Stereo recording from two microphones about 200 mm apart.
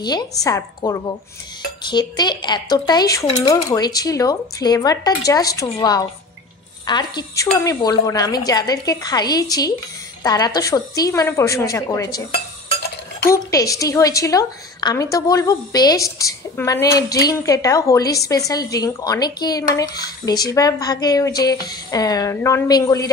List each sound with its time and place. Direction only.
0.0 s a woman's voice: 20° left (ahead or behind)
13.2 s a woman's voice: 15° left (ahead or behind)